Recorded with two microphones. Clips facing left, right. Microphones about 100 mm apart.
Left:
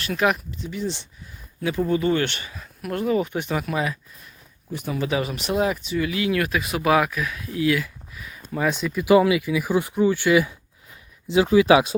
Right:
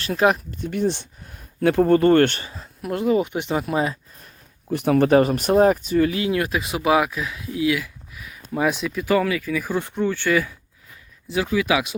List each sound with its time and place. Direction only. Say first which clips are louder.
0.0 s speech: right 3 dB; 30° right (ahead or behind)
0.5 s speech: right 6 dB; 55° right (ahead or behind)
2.3 s speech: right 1 dB; 30° right (ahead or behind)
4.7 s speech: right 9 dB; 70° right (ahead or behind); by 9.0 s centre (ahead or behind)
9.0 s speech: left 4 dB; 15° left (ahead or behind)
11.3 s speech: left 6 dB; 25° left (ahead or behind)